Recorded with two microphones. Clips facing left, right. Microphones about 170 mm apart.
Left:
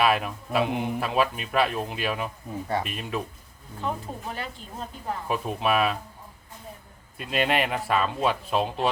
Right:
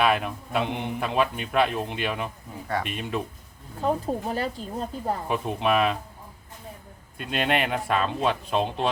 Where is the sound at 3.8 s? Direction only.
40° right (ahead or behind).